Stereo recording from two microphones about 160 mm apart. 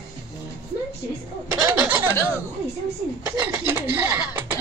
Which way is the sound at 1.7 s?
10° right (ahead or behind).